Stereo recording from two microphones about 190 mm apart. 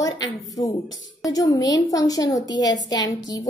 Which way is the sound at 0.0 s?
20° left (ahead or behind).